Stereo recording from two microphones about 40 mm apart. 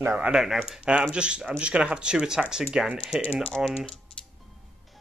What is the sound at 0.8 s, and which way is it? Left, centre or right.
Speech, right.